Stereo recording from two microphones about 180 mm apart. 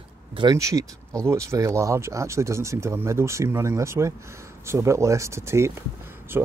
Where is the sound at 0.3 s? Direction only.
25° right (ahead or behind).